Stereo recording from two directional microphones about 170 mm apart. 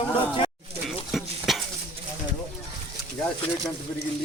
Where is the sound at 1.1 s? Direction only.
Centre (ahead or behind).